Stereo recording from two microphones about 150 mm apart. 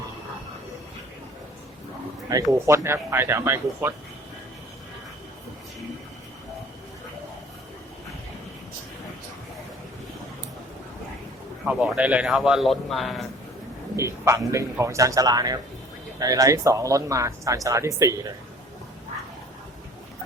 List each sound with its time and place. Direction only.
2.3 s speech: 20° right (ahead or behind)
11.6 s speech: 5° right (ahead or behind)
13.9 s speech: 20° right (ahead or behind)